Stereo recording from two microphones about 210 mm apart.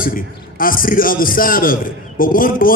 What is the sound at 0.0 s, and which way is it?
A man's voice, 40° left (ahead or behind).